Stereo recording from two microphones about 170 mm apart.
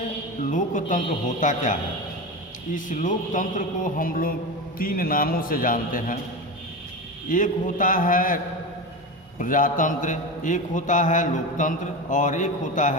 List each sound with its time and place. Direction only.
0.5 s a man's voice: 50° left (ahead or behind)
7.3 s a man's voice: 50° left (ahead or behind)
9.4 s a man's voice: 50° left (ahead or behind)